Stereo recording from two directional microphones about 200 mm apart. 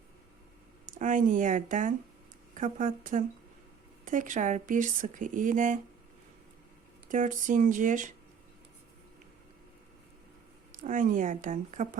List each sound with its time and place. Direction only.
0.9 s speech: 40° right (ahead or behind)
7.1 s speech: 40° right (ahead or behind)
10.7 s speech: 40° right (ahead or behind)